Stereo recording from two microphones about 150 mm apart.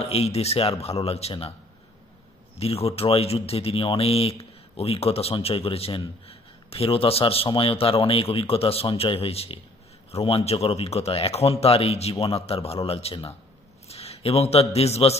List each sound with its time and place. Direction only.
0.0 s speech: 45° left (ahead or behind)
2.6 s a man's voice: 40° left (ahead or behind)